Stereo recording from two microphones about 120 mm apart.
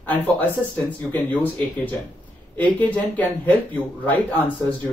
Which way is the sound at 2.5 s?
15° left (ahead or behind).